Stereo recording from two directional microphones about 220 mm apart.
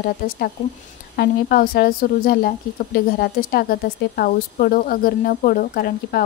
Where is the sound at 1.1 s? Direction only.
40° left (ahead or behind).